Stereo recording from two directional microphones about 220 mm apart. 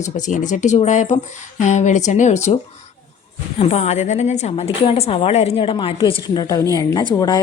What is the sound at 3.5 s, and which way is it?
A woman's voice, 30° left (ahead or behind).